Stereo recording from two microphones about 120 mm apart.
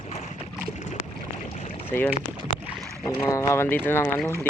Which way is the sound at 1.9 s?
20° left (ahead or behind).